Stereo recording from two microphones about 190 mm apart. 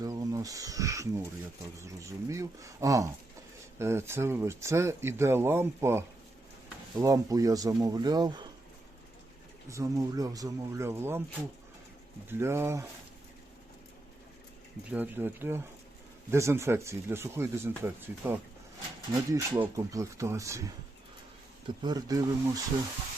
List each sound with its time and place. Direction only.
0.0 s speech: 15° right (ahead or behind)
9.6 s speech: 15° right (ahead or behind)
12.3 s speech: 15° right (ahead or behind)
14.8 s speech: 10° right (ahead or behind)
21.8 s speech: 20° right (ahead or behind)